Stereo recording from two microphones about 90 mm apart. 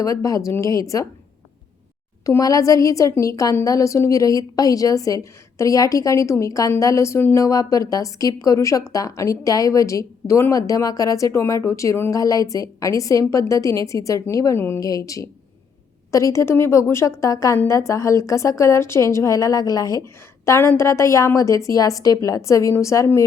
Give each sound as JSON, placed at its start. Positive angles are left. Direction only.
{"t": 0.0, "sound": "a woman's voice", "side_deg": 40}
{"t": 2.2, "sound": "a woman's voice", "side_deg": 40}
{"t": 7.4, "sound": "a woman's voice", "side_deg": 40}
{"t": 12.1, "sound": "a woman's voice", "side_deg": 40}